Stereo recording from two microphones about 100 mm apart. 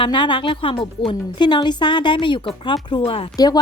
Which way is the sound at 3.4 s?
40° left (ahead or behind).